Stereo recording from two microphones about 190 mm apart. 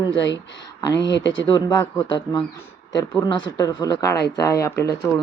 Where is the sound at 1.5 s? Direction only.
25° left (ahead or behind).